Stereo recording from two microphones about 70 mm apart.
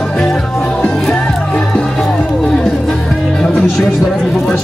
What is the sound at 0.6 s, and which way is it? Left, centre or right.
Music, centre.